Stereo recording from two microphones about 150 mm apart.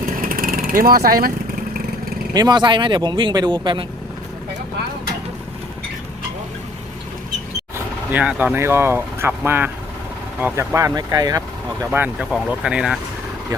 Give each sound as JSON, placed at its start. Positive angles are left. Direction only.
{"t": 0.0, "sound": "vehicle", "side_deg": -70}
{"t": 2.3, "sound": "speech", "side_deg": -25}
{"t": 8.1, "sound": "speech", "side_deg": -10}
{"t": 11.9, "sound": "speech", "side_deg": -10}